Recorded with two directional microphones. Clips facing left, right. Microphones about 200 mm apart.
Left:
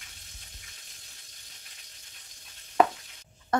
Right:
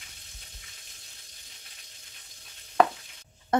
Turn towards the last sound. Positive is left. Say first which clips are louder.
# right 2 dB
turn(degrees=-20)  # may be behind; listen again after turning